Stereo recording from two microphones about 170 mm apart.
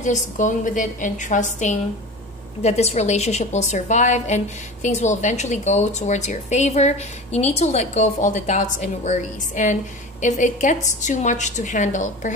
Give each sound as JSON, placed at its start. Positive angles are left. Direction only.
{"t": 0.0, "sound": "a woman's voice", "side_deg": 45}